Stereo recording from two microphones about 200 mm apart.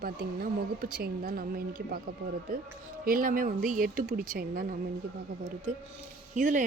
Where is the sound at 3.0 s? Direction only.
45° right (ahead or behind).